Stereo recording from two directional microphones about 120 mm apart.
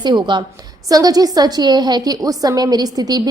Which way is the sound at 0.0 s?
40° right (ahead or behind).